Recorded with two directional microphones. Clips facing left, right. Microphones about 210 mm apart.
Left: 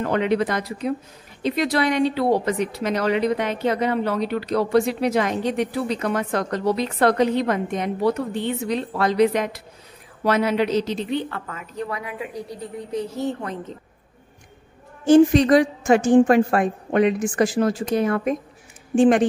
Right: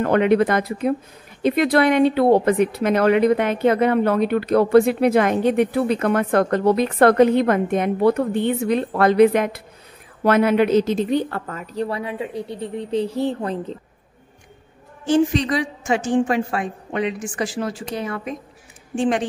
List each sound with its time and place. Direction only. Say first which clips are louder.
0.0 s a woman's voice: right 5 dB; 55° right (ahead or behind); by 13.7 s 30° right (ahead or behind)
15.0 s a woman's voice: left 5 dB; 45° left (ahead or behind)